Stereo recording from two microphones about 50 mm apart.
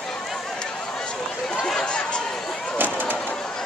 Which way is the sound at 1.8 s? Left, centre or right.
Centre.